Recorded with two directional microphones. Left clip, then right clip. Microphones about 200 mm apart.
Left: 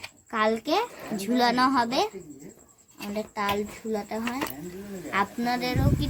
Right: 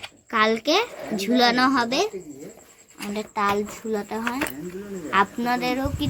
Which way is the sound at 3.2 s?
10° right (ahead or behind).